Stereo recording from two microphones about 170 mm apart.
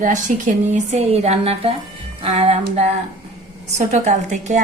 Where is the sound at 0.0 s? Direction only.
45° right (ahead or behind).